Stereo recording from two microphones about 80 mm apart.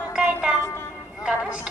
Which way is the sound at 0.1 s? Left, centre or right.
Centre.